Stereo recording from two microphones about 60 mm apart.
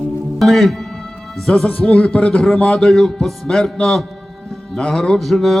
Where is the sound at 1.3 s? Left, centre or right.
Centre.